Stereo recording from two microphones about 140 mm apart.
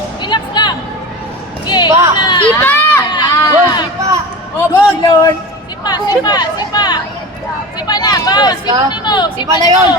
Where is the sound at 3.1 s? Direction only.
30° left (ahead or behind).